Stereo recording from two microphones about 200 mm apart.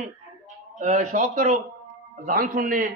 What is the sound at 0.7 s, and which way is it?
A man's voice, 40° right (ahead or behind).